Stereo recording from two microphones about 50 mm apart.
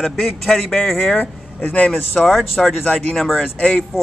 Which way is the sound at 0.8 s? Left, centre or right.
Centre.